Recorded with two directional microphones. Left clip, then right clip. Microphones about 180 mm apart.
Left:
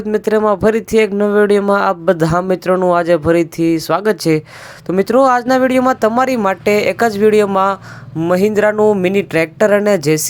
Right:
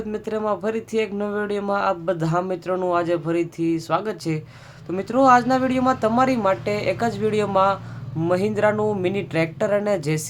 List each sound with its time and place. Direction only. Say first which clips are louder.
0.1 s speech: left 12 dB; 40° left (ahead or behind)